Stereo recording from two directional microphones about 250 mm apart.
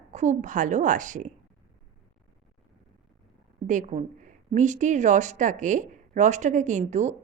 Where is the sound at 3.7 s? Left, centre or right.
Right.